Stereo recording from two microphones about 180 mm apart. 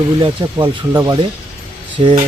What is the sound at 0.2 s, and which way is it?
Speech, 25° right (ahead or behind).